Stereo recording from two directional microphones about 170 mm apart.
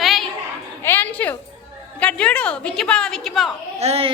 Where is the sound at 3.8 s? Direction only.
35° right (ahead or behind).